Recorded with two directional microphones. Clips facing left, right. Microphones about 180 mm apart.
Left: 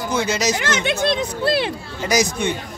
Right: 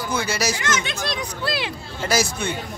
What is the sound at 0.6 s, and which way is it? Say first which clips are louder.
Speech: left 4 dB; 65° left (ahead or behind).